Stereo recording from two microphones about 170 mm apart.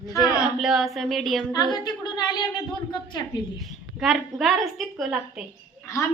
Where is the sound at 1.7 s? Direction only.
25° left (ahead or behind).